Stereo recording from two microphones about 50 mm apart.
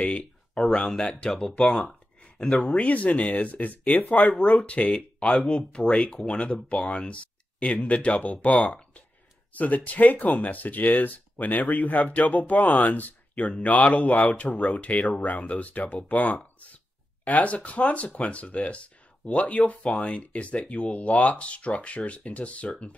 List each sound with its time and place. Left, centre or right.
0.0 s a sound: centre
0.6 s speech: centre
2.7 s speech: left